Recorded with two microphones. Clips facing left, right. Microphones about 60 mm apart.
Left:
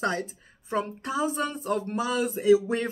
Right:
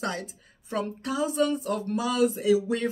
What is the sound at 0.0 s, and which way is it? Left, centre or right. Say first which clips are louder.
A woman's voice: left 4 dB; left.